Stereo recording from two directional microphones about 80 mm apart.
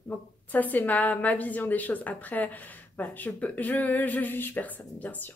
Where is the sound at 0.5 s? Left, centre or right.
Left.